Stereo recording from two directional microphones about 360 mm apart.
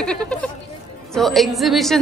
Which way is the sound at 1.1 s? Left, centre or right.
Centre.